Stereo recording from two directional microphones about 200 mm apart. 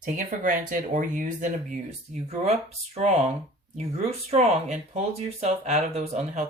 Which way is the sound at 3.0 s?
30° right (ahead or behind).